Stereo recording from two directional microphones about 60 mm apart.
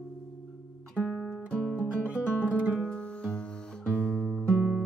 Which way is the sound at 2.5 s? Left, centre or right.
Centre.